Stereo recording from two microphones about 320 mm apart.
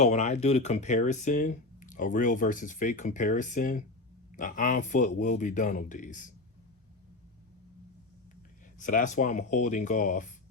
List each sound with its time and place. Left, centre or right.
0.0 s speech: left
8.8 s speech: left